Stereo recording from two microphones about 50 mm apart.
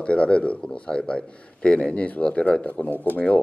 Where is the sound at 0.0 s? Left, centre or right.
Left.